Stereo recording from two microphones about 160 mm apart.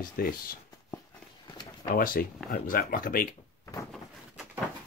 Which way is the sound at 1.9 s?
60° left (ahead or behind).